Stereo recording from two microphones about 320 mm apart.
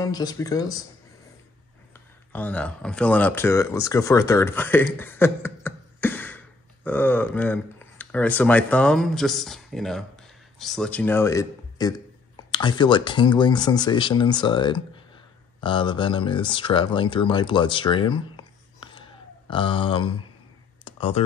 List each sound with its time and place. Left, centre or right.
0.0 s speech: centre
2.3 s speech: centre
20.8 s a sound: centre